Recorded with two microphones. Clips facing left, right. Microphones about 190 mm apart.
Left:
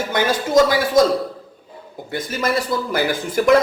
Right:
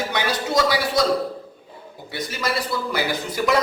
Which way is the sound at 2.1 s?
50° left (ahead or behind).